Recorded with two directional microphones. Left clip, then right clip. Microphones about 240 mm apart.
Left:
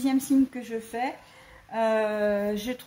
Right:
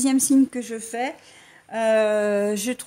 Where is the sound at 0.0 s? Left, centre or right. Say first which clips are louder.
Right 5 dB; right.